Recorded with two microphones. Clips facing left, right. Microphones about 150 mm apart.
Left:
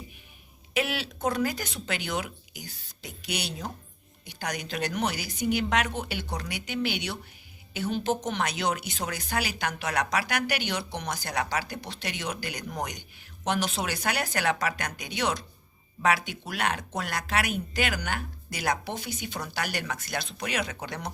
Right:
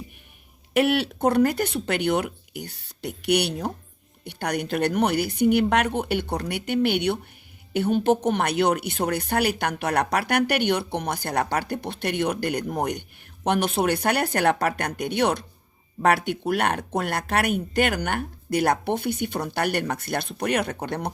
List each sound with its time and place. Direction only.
0.7 s speech: 60° right (ahead or behind)